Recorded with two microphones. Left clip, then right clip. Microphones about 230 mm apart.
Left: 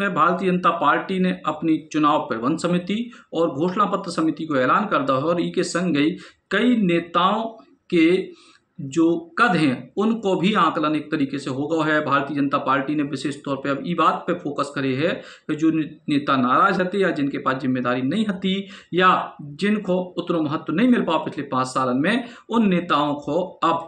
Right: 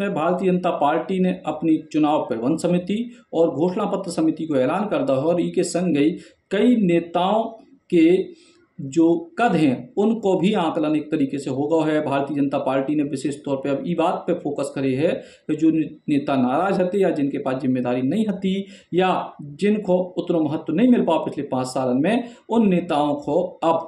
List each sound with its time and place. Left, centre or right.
0.0 s speech: centre